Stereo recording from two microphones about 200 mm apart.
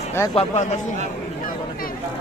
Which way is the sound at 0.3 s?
35° left (ahead or behind).